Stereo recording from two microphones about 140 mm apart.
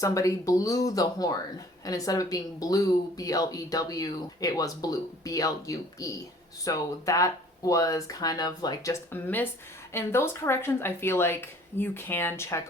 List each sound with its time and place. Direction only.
0.0 s speech: 25° left (ahead or behind)